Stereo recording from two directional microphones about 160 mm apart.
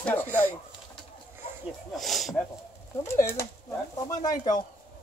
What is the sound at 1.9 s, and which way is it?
Speech, centre (ahead or behind).